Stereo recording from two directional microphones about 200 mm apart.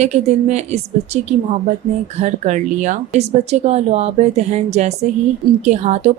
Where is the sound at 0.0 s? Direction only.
35° right (ahead or behind).